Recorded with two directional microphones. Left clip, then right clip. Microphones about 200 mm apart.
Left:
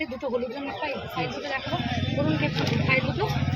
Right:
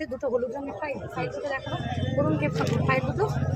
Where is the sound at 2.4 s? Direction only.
15° right (ahead or behind).